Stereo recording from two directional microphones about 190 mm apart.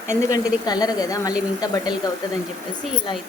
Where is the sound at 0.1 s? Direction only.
20° left (ahead or behind).